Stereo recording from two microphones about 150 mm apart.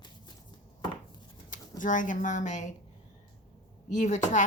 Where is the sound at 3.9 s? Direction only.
55° left (ahead or behind).